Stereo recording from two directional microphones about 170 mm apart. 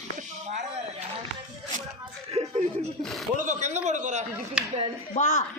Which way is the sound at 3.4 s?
45° right (ahead or behind).